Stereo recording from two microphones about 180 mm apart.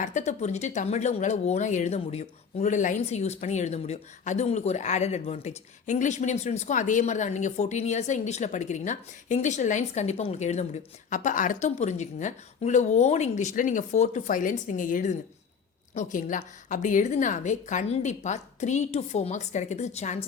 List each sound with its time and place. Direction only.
0.0 s a woman's voice: 45° left (ahead or behind)